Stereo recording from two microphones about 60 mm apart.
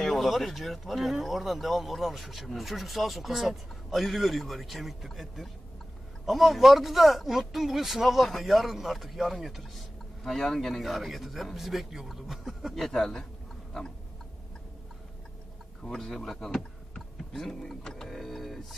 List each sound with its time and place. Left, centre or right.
0.0 s speech: centre
15.8 s speech: centre